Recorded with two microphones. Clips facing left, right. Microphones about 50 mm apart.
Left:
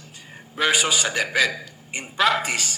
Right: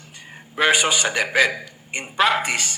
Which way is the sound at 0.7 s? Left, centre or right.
Right.